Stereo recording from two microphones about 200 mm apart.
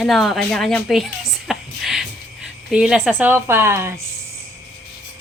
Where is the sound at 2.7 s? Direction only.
5° right (ahead or behind).